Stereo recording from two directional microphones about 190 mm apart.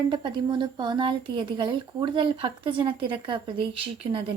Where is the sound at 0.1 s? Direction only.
25° right (ahead or behind).